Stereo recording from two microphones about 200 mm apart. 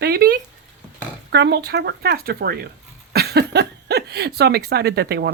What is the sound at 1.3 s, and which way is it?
Speech, 60° right (ahead or behind).